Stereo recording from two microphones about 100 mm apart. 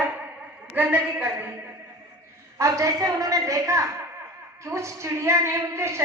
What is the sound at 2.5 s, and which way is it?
A woman's voice, 30° right (ahead or behind).